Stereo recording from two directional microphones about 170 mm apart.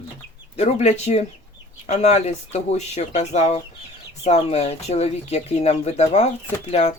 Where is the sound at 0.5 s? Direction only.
40° left (ahead or behind).